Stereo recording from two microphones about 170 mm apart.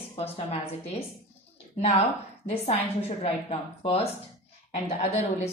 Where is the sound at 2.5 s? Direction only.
35° left (ahead or behind).